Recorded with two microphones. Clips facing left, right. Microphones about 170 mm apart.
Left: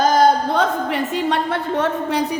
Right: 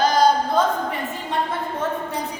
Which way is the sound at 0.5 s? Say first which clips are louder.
Left 2 dB; 75° left (ahead or behind).